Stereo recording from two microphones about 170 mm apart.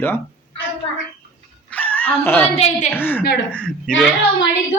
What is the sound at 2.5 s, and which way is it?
Speech, 40° left (ahead or behind).